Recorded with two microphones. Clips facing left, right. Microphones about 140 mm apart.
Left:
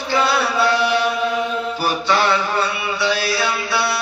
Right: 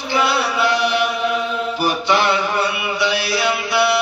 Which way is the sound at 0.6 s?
15° right (ahead or behind).